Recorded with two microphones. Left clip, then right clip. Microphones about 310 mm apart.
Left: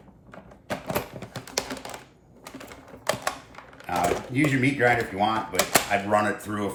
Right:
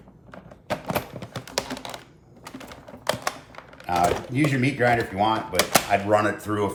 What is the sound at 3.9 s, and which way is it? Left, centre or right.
Speech, centre.